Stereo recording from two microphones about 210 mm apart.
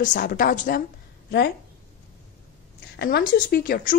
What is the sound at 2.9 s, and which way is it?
Speech, 50° left (ahead or behind).